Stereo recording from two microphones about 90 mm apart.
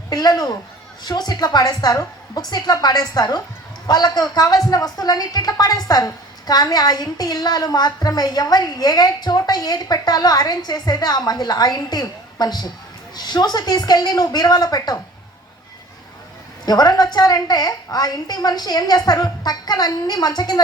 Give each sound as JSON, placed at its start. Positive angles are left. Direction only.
{"t": 0.1, "sound": "speech", "side_deg": 45}
{"t": 16.6, "sound": "speech", "side_deg": 50}